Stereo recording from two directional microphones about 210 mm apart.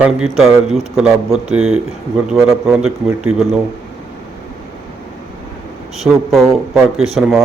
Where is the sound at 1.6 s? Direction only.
85° right.